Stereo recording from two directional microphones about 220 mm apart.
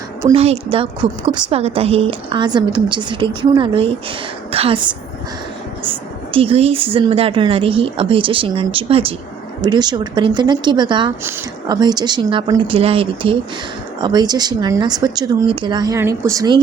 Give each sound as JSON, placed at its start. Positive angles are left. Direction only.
{"t": 0.3, "sound": "speech", "side_deg": -30}
{"t": 6.3, "sound": "speech", "side_deg": -25}